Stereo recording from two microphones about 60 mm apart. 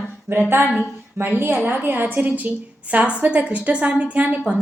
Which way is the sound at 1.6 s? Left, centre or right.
Right.